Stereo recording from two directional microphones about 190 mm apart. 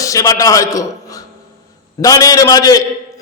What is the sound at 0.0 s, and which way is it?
A man's voice, 15° left (ahead or behind).